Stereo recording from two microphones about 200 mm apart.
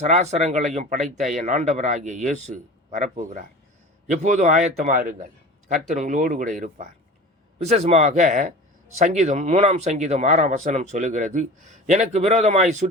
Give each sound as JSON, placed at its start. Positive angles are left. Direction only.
{"t": 0.0, "sound": "speech", "side_deg": -35}